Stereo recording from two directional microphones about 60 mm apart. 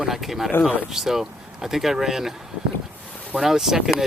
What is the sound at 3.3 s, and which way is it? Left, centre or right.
Speech, centre.